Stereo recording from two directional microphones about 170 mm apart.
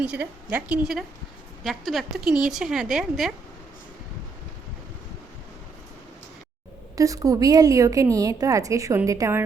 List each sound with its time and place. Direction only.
0.0 s a woman's voice: 10° right (ahead or behind)
6.9 s a woman's voice: 20° right (ahead or behind)